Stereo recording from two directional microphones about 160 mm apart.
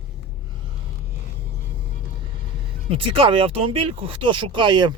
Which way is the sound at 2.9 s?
35° right (ahead or behind).